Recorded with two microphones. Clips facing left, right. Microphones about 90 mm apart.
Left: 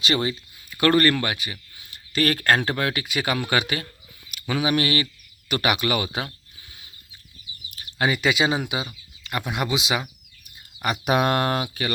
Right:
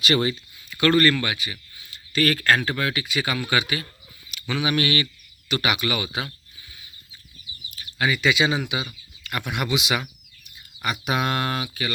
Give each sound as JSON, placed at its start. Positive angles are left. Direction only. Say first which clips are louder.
{"t": 0.0, "sound": "speech", "louder": "right 2 dB", "side_deg": 25}
{"t": 0.8, "sound": "speech", "louder": "even", "side_deg": 40}
{"t": 4.3, "sound": "a sound", "louder": "left 2 dB", "side_deg": 45}
{"t": 4.6, "sound": "speech", "louder": "left 1 dB", "side_deg": 30}
{"t": 5.5, "sound": "speech", "louder": "left 2 dB", "side_deg": 45}
{"t": 7.8, "sound": "speech", "louder": "left 1 dB", "side_deg": 40}
{"t": 9.2, "sound": "speech", "louder": "left 1 dB", "side_deg": 25}
{"t": 11.0, "sound": "speech", "louder": "left 4 dB", "side_deg": 45}